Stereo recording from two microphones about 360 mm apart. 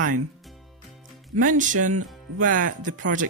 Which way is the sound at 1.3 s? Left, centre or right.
Right.